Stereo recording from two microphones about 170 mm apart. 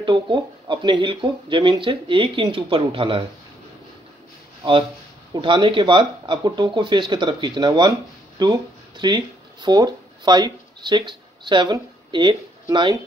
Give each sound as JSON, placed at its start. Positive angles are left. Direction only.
{"t": 0.0, "sound": "speech", "side_deg": -30}
{"t": 5.3, "sound": "speech", "side_deg": -30}